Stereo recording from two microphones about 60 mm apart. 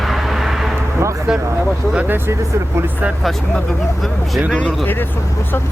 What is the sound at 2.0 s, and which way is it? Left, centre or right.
Speech, right.